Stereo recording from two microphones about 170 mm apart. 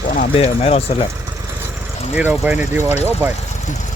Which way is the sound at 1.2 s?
15° right (ahead or behind).